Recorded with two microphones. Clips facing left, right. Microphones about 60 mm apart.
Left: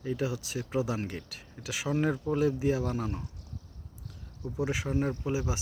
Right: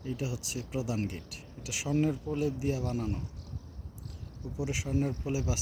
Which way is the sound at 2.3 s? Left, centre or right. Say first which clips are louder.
Left 4 dB; left.